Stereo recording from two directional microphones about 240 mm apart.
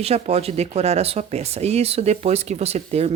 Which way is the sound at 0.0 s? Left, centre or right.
Right.